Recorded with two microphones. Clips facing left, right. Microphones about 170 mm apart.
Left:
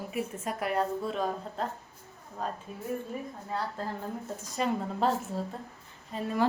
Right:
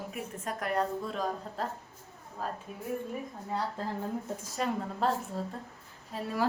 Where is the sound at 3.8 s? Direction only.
20° right (ahead or behind).